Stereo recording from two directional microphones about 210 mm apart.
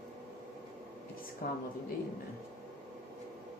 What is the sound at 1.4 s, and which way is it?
Speech, 45° left (ahead or behind).